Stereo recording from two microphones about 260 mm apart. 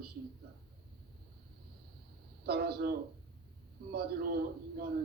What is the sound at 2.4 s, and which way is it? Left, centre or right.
Speech, right.